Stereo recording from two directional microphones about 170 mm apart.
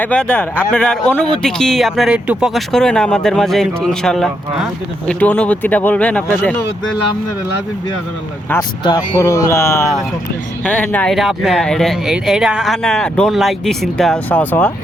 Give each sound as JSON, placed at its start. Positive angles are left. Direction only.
{"t": 0.0, "sound": "speech", "side_deg": 5}
{"t": 8.8, "sound": "speech", "side_deg": 25}